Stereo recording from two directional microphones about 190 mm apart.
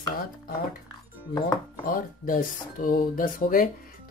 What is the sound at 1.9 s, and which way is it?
Speech, 45° left (ahead or behind).